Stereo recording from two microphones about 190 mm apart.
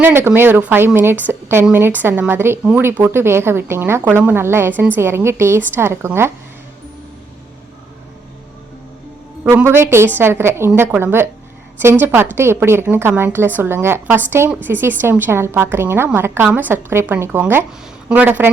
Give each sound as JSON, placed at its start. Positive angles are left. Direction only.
{"t": 0.0, "sound": "a woman's voice", "side_deg": -10}
{"t": 9.4, "sound": "a woman's voice", "side_deg": -10}